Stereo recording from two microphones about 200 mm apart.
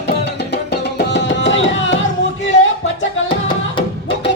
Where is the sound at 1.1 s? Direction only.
65° left (ahead or behind).